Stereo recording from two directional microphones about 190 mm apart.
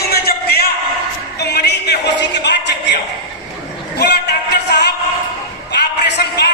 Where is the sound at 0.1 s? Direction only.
55° left (ahead or behind).